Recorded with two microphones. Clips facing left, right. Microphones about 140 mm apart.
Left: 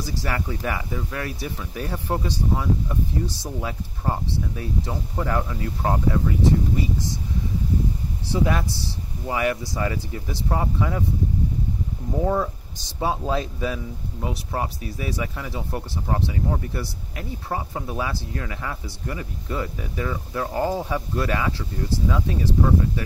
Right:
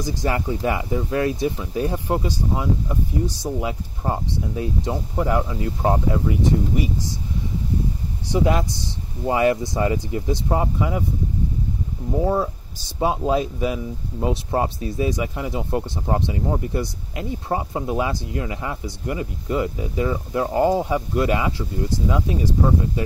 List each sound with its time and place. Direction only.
0.0 s speech: 20° right (ahead or behind)
8.3 s speech: 20° right (ahead or behind)
12.2 s speech: 10° right (ahead or behind)
14.2 s speech: 25° right (ahead or behind)